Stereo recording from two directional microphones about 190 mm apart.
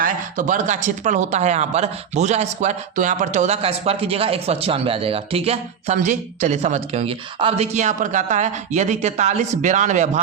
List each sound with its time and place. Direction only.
0.0 s speech: 45° right (ahead or behind)